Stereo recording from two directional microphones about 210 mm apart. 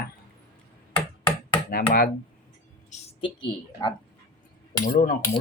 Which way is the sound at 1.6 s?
45° left (ahead or behind).